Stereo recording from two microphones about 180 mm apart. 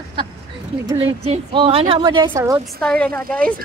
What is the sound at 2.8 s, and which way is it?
Speech, 5° left (ahead or behind).